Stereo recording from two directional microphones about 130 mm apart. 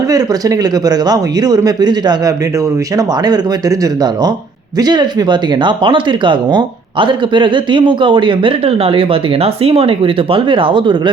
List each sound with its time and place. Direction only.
0.1 s speech: 30° right (ahead or behind)